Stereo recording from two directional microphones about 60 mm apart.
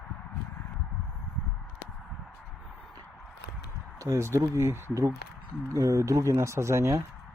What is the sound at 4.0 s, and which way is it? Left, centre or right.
Speech, right.